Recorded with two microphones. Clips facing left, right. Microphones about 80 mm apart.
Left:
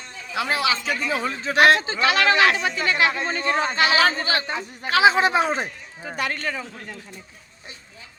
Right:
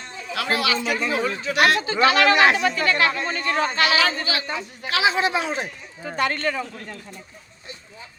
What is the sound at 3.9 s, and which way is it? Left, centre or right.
Speech, left.